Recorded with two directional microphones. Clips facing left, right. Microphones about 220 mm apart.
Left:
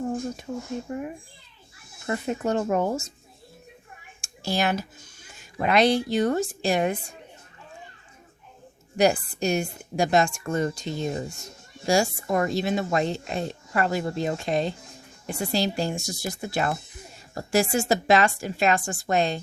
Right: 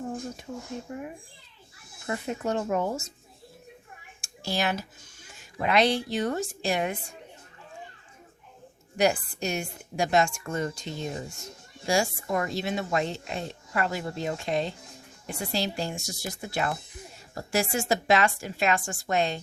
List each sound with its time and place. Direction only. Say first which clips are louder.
0.5 s speech: left 4 dB; 65° left (ahead or behind)
0.9 s speech: left 6 dB; 45° left (ahead or behind)
2.0 s speech: left 4 dB; 45° left (ahead or behind)
4.2 s a child's voice: left 3 dB; 50° left (ahead or behind)
9.0 s speech: left 3 dB; 35° left (ahead or behind)